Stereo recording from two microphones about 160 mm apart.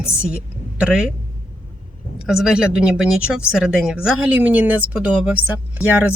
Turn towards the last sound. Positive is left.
turn(degrees=-10)  # may be behind; listen again after turning